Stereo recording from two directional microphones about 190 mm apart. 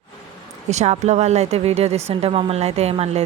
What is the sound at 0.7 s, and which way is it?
Speech, 35° right (ahead or behind).